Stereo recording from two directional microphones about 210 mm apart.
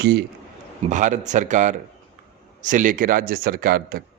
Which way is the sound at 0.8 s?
35° right (ahead or behind).